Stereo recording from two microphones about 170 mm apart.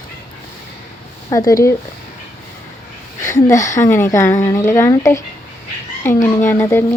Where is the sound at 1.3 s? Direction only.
20° left (ahead or behind).